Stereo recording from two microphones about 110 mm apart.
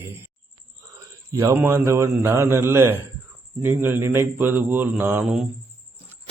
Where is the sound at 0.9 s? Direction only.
30° right (ahead or behind).